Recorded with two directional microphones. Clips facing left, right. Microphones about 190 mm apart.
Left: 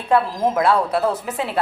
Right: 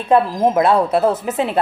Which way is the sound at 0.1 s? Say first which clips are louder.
Right 4 dB; 20° right (ahead or behind).